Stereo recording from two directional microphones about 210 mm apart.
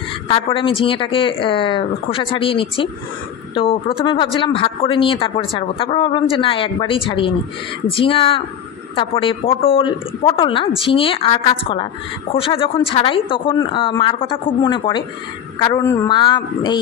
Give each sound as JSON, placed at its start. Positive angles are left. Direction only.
{"t": 0.3, "sound": "a woman's voice", "side_deg": 25}